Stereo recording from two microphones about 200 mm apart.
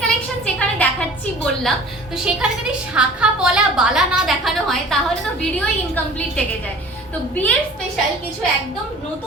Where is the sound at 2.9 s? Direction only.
5° right (ahead or behind).